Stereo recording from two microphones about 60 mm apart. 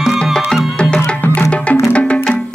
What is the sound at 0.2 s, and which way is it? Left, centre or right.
Music, centre.